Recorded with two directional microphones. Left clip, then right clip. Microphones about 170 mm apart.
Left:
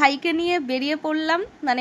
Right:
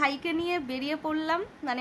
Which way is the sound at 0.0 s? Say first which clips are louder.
Left 8 dB; 30° left (ahead or behind).